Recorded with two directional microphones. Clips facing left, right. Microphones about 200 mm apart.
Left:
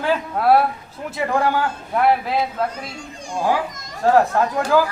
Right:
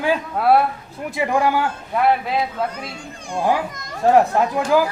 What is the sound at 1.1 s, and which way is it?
Speech, 15° right (ahead or behind).